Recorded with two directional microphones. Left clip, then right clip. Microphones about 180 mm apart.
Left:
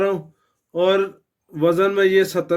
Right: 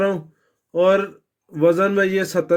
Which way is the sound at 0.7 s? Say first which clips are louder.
Right 2 dB; 30° right (ahead or behind).